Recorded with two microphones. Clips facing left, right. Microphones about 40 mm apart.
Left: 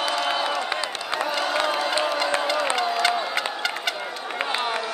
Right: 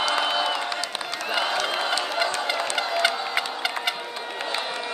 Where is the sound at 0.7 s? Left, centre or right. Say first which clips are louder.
Left 2 dB; left.